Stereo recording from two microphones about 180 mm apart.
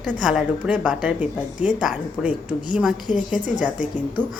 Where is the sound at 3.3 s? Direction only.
45° left (ahead or behind).